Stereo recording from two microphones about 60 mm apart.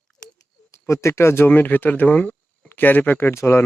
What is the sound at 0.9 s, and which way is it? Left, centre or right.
Speech, left.